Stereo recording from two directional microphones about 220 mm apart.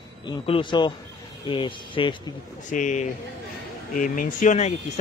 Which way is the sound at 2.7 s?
35° left (ahead or behind).